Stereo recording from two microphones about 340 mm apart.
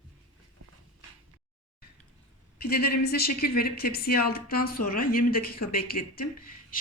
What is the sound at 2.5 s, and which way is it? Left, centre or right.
A woman's voice, left.